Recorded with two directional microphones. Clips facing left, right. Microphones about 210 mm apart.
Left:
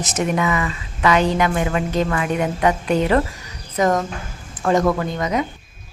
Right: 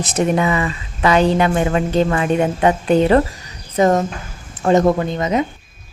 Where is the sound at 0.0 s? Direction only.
30° right (ahead or behind).